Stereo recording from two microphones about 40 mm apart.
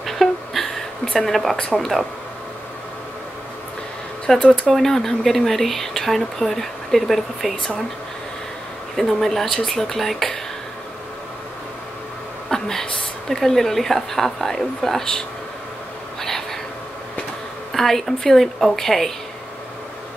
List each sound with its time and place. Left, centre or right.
0.0 s a sound: centre
1.2 s speech: centre
1.6 s speech: centre
4.3 s speech: centre
8.9 s speech: centre
12.4 s a woman's voice: centre
16.2 s a sound: centre
17.7 s speech: centre